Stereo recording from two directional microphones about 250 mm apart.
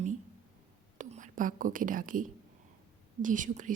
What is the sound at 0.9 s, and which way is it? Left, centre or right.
A woman's voice, right.